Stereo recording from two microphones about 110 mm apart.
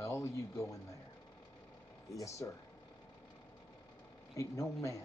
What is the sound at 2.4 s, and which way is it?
Speech, 30° left (ahead or behind).